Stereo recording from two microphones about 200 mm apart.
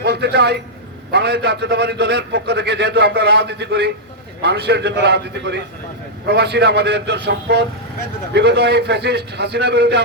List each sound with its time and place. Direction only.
0.0 s a man's voice: 55° right (ahead or behind)